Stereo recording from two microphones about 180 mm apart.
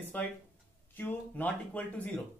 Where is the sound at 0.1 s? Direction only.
10° left (ahead or behind).